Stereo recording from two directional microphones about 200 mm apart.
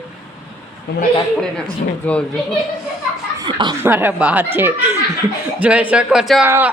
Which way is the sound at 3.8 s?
10° right (ahead or behind).